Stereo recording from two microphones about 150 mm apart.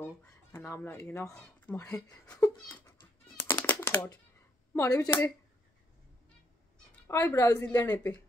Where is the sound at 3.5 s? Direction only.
15° left (ahead or behind).